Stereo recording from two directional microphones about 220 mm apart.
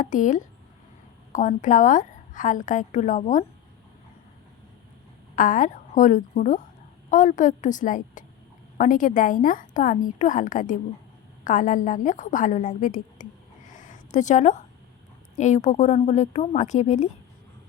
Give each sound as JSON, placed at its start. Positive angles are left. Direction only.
{"t": 0.0, "sound": "a woman's voice", "side_deg": 35}
{"t": 5.4, "sound": "a woman's voice", "side_deg": 35}
{"t": 13.7, "sound": "a sound", "side_deg": 35}
{"t": 15.4, "sound": "a woman's voice", "side_deg": 30}